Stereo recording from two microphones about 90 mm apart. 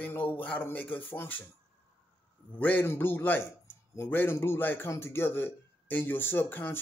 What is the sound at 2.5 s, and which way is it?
A man's voice, 20° left (ahead or behind).